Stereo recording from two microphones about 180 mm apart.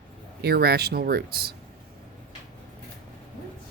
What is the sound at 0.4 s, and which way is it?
Speech, 65° right (ahead or behind).